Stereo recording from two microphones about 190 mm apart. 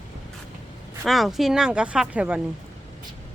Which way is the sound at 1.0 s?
Centre (ahead or behind).